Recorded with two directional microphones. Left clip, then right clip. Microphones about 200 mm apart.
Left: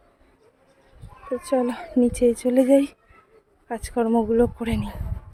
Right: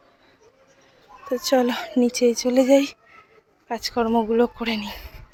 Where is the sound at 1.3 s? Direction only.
Centre (ahead or behind).